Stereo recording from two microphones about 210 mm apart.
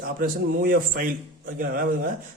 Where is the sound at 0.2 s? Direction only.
45° right (ahead or behind).